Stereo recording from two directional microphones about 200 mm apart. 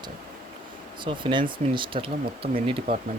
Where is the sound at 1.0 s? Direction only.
25° right (ahead or behind).